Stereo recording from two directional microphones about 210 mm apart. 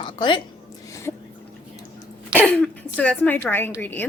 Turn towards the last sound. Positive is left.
turn(degrees=10)  # may be behind; listen again after turning